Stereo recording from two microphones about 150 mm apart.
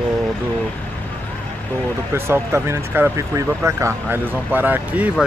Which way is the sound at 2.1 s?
15° right (ahead or behind).